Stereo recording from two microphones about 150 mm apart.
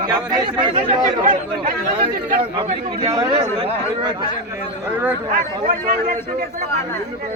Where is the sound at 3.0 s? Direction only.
20° right (ahead or behind).